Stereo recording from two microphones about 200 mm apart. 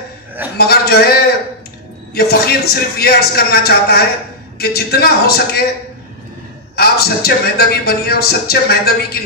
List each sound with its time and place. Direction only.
0.6 s a man's voice: 50° left (ahead or behind)
2.1 s a man's voice: 50° left (ahead or behind)
6.7 s a man's voice: 50° left (ahead or behind)